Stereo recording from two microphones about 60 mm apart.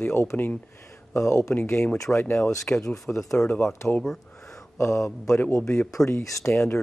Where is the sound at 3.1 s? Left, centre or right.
Left.